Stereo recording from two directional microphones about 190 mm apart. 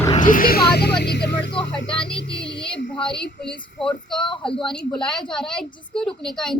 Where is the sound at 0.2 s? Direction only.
45° left (ahead or behind).